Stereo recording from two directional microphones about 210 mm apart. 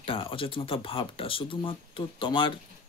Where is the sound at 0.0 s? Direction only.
25° left (ahead or behind).